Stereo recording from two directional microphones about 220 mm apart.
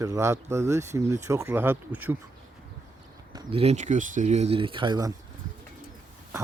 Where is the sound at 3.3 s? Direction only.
25° right (ahead or behind).